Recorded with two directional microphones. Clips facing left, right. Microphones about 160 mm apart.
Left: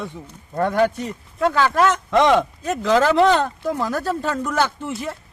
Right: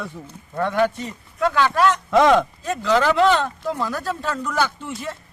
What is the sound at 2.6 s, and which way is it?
Speech, 45° left (ahead or behind).